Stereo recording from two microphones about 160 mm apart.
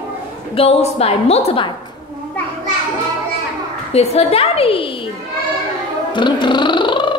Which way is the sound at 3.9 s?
40° left (ahead or behind).